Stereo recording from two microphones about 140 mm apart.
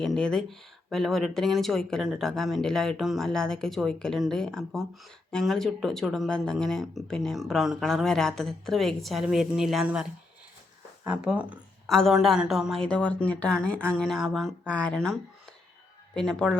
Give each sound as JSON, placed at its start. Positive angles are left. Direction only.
{"t": 0.0, "sound": "speech", "side_deg": 5}
{"t": 14.7, "sound": "speech", "side_deg": 10}